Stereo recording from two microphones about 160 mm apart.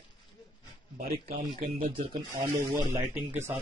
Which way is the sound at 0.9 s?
55° right (ahead or behind).